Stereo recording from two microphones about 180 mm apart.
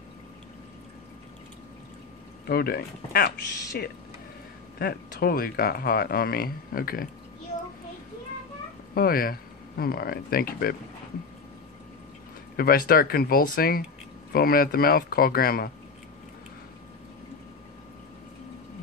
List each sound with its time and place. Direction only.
2.4 s speech: 60° left (ahead or behind)
8.9 s speech: 55° left (ahead or behind)
12.5 s speech: 55° left (ahead or behind)